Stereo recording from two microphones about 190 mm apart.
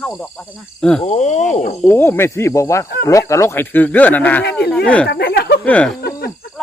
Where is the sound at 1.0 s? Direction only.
35° left (ahead or behind).